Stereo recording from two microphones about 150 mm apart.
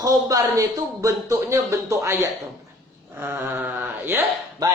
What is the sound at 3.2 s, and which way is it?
Speech, 15° right (ahead or behind).